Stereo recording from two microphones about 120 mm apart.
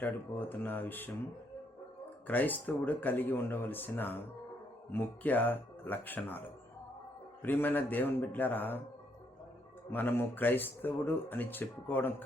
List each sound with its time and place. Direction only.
0.0 s speech: 15° left (ahead or behind)
2.2 s speech: 15° left (ahead or behind)
7.4 s speech: 15° left (ahead or behind)
9.9 s speech: 15° left (ahead or behind)